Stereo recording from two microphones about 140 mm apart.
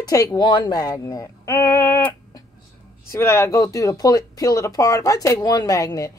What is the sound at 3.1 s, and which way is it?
A woman's voice, 20° left (ahead or behind).